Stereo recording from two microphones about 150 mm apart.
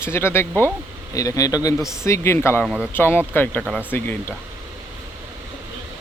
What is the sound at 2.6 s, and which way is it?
Speech, 5° right (ahead or behind).